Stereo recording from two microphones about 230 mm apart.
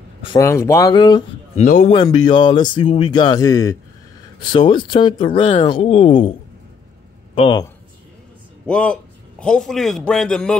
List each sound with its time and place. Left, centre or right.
0.2 s speech: centre
1.6 s a man's voice: left
1.9 s speech: centre
7.3 s speech: centre
8.6 s a man's voice: centre